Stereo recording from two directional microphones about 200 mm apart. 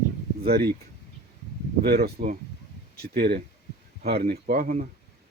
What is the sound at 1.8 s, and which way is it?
Speech, 50° right (ahead or behind).